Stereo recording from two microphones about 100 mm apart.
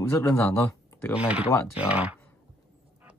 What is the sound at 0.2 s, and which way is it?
Speech, 30° left (ahead or behind).